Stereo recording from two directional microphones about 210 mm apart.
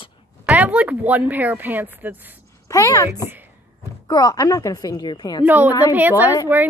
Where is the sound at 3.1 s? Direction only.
10° right (ahead or behind).